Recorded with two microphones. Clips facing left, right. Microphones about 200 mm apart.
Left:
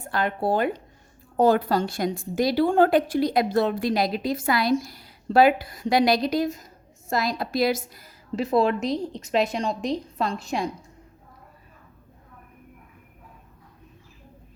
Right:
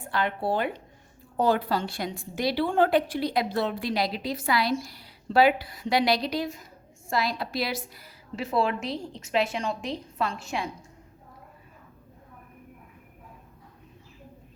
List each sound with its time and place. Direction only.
0.0 s a woman's voice: 45° left (ahead or behind)